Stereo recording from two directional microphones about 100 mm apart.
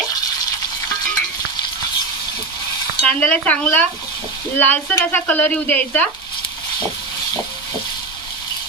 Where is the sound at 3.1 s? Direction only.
15° left (ahead or behind).